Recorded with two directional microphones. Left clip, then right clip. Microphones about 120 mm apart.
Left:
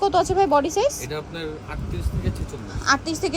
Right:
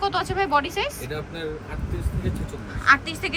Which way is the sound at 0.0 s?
60° left (ahead or behind).